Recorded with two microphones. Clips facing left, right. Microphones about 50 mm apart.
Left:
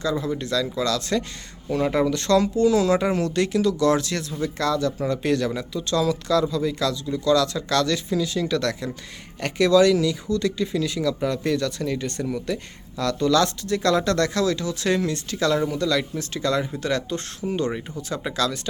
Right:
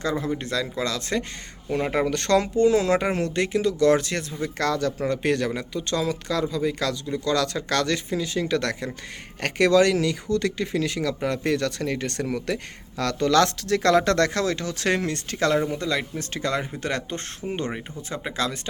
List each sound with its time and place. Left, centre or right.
0.0 s speech: right
2.0 s speech: right
15.7 s speech: right
18.1 s speech: right